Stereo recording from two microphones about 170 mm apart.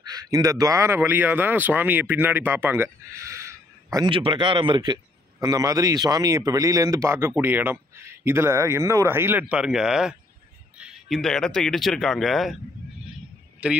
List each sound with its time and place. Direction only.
0.0 s speech: 25° right (ahead or behind); by 12.5 s centre (ahead or behind)
13.6 s speech: 5° right (ahead or behind)